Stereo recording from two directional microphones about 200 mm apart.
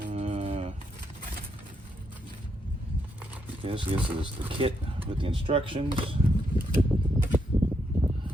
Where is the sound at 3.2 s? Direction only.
10° right (ahead or behind).